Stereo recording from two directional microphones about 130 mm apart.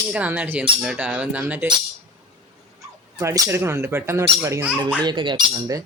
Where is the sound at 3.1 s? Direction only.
25° right (ahead or behind).